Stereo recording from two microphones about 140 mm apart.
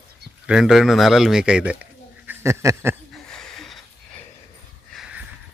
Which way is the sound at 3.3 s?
5° left (ahead or behind).